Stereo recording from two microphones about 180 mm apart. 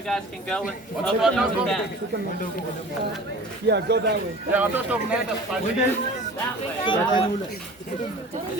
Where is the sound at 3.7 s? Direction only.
70° right (ahead or behind).